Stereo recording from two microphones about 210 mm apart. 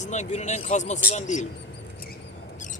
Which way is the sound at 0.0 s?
35° left (ahead or behind).